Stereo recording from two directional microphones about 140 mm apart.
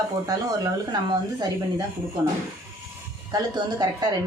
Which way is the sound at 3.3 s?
30° right (ahead or behind).